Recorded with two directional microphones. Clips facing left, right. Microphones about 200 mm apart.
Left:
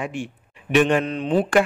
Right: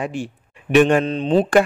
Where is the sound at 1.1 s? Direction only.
30° right (ahead or behind).